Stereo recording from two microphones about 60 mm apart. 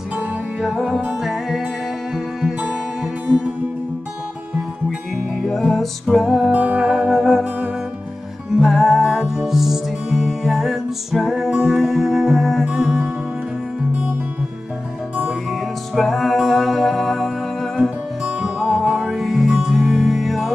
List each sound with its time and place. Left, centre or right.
0.6 s music: centre
5.5 s music: centre
6.5 s music: right
6.8 s music: centre
8.5 s music: centre
15.9 s music: centre
18.2 s music: centre